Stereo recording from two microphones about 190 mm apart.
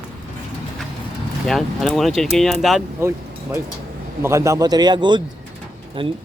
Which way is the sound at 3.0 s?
15° right (ahead or behind).